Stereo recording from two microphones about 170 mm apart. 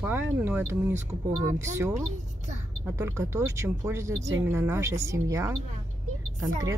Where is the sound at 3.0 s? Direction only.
15° right (ahead or behind).